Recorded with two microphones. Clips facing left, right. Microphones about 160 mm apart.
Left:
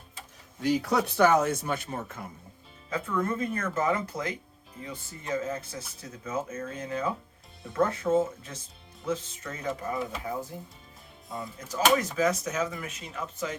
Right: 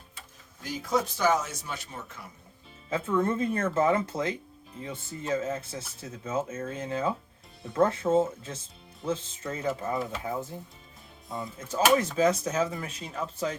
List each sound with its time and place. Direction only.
0.6 s speech: 70° left (ahead or behind); by 2.3 s 50° left (ahead or behind)
2.9 s speech: 25° right (ahead or behind)
11.7 s speech: 30° right (ahead or behind)